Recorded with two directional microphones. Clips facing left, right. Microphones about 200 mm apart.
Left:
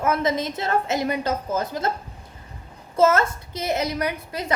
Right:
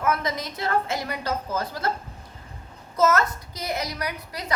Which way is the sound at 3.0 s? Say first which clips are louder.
Left 3 dB; 25° left (ahead or behind).